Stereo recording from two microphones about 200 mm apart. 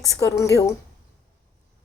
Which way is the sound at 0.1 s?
15° left (ahead or behind).